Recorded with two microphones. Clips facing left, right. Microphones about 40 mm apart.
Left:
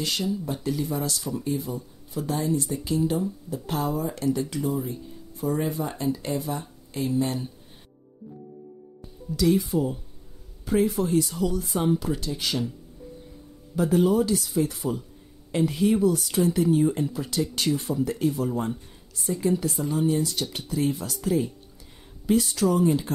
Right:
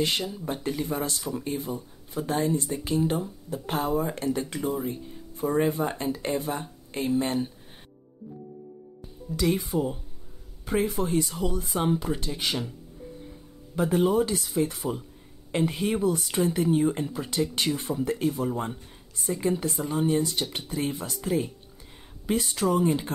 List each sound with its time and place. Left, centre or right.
0.5 s speech: right
9.4 s speech: right
13.7 s speech: right